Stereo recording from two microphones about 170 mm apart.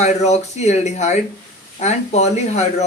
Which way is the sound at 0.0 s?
40° left (ahead or behind).